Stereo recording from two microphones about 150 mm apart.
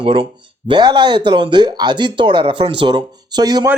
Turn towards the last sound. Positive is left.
turn(degrees=-25)  # may be behind; listen again after turning